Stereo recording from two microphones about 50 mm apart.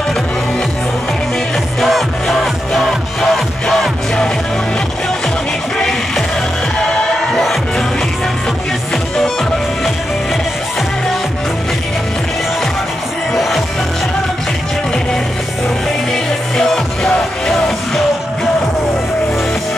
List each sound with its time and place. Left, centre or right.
1.8 s music: centre
5.8 s music: centre
9.1 s music: centre
13.3 s music: centre
16.1 s music: centre